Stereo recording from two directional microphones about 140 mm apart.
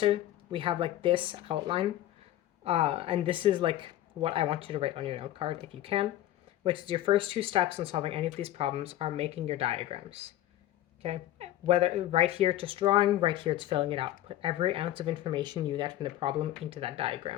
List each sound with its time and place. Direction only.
0.0 s speech: 40° right (ahead or behind)